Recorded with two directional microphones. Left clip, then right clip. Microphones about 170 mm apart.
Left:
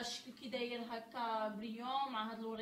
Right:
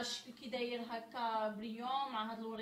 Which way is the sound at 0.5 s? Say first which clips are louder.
Right 2 dB; 15° right (ahead or behind).